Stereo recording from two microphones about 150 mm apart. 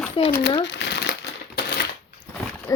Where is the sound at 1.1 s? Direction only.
90° left.